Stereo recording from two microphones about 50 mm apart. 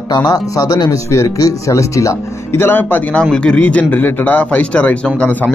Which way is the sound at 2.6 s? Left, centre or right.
Left.